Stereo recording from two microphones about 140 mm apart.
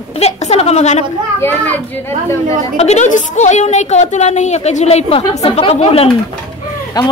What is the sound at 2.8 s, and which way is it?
A woman's voice, 55° left (ahead or behind).